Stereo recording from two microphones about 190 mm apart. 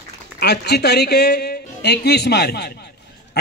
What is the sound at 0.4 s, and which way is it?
A man's voice, 60° left (ahead or behind).